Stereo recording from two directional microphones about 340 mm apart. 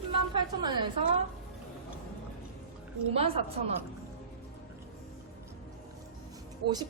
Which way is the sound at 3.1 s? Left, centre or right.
Centre.